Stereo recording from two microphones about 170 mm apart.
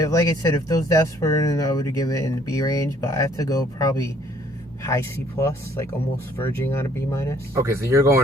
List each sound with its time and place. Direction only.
0.0 s speech: 20° left (ahead or behind)
7.5 s speech: 15° right (ahead or behind)